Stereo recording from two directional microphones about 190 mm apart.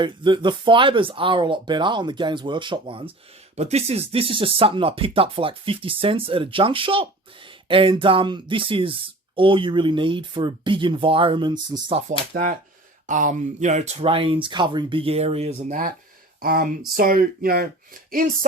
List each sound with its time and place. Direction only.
0.0 s speech: 25° right (ahead or behind)
12.3 s speech: 45° right (ahead or behind)
16.4 s speech: 50° right (ahead or behind)